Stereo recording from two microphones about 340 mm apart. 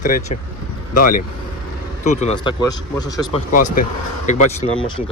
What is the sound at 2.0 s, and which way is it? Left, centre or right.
Speech, centre.